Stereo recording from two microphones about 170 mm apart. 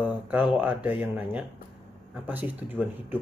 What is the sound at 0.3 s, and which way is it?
Speech, 10° right (ahead or behind).